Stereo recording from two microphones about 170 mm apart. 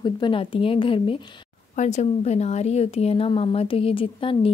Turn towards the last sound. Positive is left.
turn(degrees=30)  # may be behind; listen again after turning